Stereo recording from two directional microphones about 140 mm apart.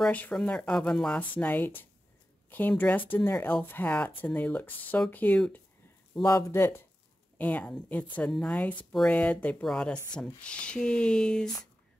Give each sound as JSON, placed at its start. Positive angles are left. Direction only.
{"t": 0.0, "sound": "speech", "side_deg": 10}